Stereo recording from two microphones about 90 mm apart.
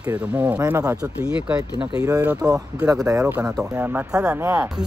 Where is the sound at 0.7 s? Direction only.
45° right (ahead or behind).